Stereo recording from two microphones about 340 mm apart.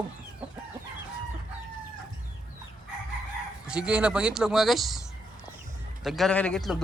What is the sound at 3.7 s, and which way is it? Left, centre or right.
A man's voice, centre.